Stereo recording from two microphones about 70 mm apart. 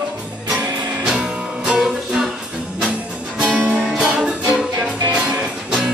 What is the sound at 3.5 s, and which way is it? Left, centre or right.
Music, right.